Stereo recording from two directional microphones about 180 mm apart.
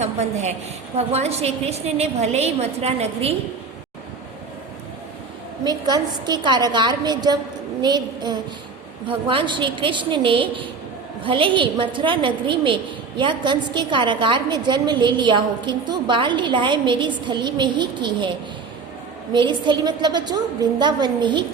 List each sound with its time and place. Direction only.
0.0 s a woman's voice: 40° right (ahead or behind)
5.6 s a woman's voice: 20° right (ahead or behind)